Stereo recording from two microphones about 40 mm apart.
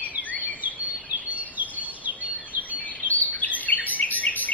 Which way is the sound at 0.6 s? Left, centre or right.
Right.